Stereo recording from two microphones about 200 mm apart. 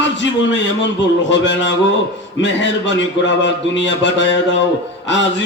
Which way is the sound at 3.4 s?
65° left (ahead or behind).